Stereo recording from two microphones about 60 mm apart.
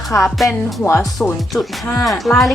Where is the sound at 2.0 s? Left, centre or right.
Centre.